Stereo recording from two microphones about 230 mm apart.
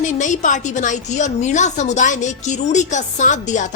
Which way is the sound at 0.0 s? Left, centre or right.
Left.